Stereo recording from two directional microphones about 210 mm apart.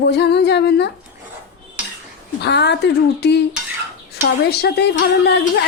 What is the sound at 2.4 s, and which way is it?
A woman's voice, 55° left (ahead or behind).